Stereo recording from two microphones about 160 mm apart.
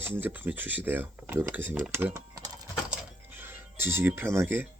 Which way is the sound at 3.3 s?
10° right (ahead or behind).